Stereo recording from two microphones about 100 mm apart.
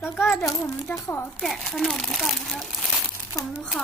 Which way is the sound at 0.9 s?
30° left (ahead or behind).